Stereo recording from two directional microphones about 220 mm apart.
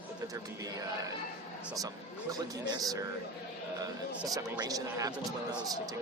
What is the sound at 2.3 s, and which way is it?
Speech, 15° right (ahead or behind).